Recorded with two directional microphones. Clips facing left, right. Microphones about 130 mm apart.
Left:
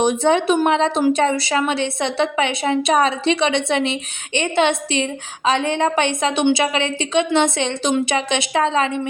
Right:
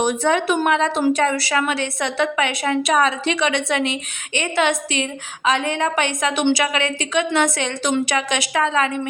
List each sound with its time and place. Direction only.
0.0 s speech: 25° left (ahead or behind)